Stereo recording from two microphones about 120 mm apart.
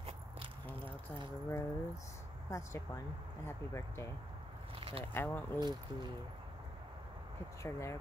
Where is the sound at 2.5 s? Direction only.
25° left (ahead or behind).